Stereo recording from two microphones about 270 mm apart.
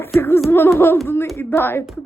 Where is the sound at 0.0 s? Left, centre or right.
Centre.